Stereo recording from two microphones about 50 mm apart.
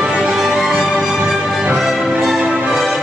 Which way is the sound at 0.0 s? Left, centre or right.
Centre.